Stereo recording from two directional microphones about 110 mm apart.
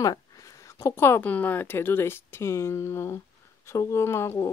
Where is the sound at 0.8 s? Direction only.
25° left (ahead or behind).